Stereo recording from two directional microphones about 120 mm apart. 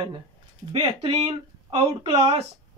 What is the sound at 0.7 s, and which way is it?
Speech, 50° right (ahead or behind).